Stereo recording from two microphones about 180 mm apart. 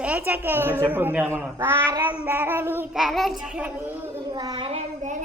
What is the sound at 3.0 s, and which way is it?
Child singing, centre (ahead or behind).